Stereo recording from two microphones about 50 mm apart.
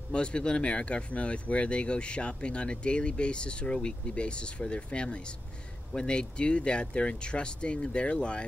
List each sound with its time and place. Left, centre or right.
0.1 s speech: centre